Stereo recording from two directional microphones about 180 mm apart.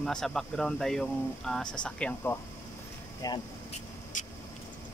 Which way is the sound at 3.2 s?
20° left (ahead or behind).